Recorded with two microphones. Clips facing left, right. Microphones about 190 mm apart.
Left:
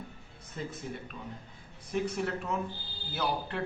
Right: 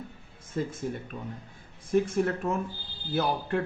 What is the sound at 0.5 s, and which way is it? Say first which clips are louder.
Speech: right 7 dB; 45° right (ahead or behind).